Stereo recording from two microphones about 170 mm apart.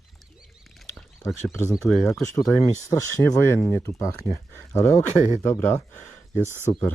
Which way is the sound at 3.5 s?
15° left (ahead or behind).